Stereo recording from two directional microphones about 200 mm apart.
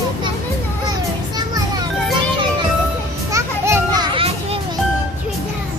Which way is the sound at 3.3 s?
15° right (ahead or behind).